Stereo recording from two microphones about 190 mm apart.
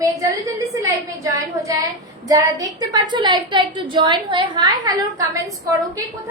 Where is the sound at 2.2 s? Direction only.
20° right (ahead or behind).